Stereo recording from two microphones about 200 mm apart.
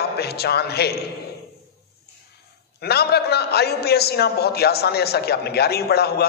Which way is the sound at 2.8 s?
55° left (ahead or behind).